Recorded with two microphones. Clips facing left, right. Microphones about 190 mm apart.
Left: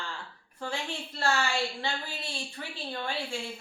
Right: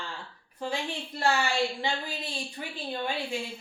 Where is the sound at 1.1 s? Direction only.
15° right (ahead or behind).